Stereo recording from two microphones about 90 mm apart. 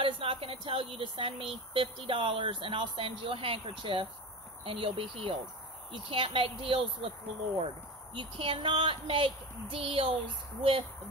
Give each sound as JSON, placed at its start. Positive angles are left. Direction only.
{"t": 0.0, "sound": "speech", "side_deg": -85}
{"t": 8.1, "sound": "speech", "side_deg": -70}